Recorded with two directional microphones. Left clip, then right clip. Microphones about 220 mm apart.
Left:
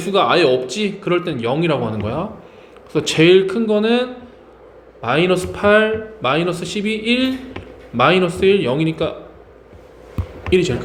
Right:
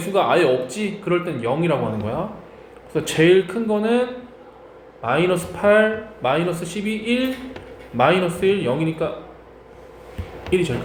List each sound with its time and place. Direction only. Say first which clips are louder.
0.1 s a man's voice: left 3 dB; 45° left (ahead or behind)
5.0 s a man's voice: left 3 dB; 50° left (ahead or behind)